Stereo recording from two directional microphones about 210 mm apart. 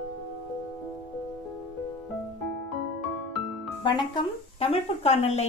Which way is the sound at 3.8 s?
20° left (ahead or behind).